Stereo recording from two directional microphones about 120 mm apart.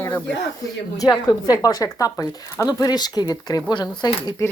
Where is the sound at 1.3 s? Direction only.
30° left (ahead or behind).